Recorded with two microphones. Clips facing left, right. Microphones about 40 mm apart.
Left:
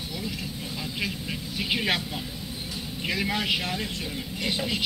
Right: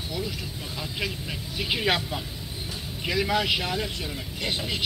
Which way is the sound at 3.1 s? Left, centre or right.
Centre.